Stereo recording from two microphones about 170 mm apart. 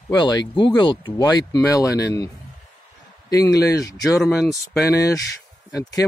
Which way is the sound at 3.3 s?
20° left (ahead or behind).